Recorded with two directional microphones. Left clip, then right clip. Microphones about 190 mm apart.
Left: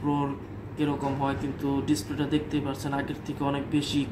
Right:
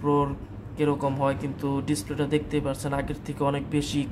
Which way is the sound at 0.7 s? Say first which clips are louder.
Right 3 dB; 60° right (ahead or behind).